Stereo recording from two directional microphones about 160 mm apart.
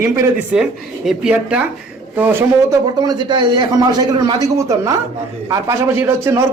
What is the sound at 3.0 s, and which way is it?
A man's voice, 25° right (ahead or behind).